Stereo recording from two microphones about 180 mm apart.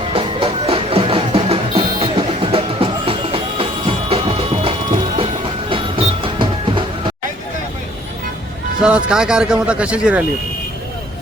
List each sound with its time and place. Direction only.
0.1 s music: 30° right (ahead or behind)
8.8 s speech: 5° right (ahead or behind)